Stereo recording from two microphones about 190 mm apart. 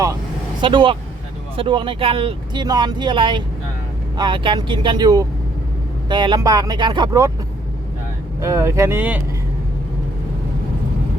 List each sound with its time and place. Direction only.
0.6 s speech: 25° right (ahead or behind)
8.4 s speech: 15° right (ahead or behind)